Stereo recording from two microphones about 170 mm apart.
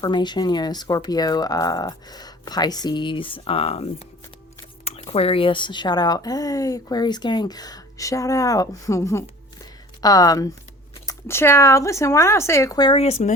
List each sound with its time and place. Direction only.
0.0 s speech: 25° left (ahead or behind)
4.9 s speech: 35° left (ahead or behind)